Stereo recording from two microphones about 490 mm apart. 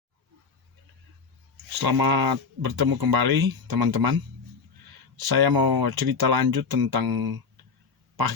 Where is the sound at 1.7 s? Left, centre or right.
Right.